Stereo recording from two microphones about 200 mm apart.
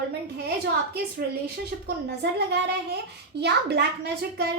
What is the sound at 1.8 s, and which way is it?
A child's voice, 55° right (ahead or behind).